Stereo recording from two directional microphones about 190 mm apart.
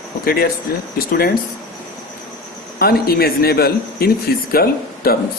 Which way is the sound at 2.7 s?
55° left (ahead or behind).